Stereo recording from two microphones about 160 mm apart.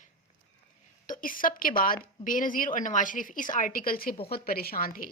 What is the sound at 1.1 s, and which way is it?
A woman's voice, 60° left (ahead or behind).